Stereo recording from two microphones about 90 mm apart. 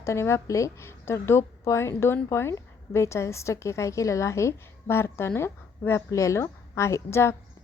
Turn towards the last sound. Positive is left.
turn(degrees=30)  # may be behind; listen again after turning